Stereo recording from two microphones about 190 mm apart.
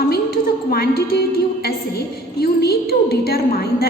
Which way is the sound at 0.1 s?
55° left (ahead or behind).